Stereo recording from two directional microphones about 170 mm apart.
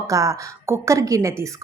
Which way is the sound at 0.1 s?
20° right (ahead or behind).